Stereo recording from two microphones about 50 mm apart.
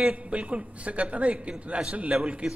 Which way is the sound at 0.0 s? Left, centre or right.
Centre.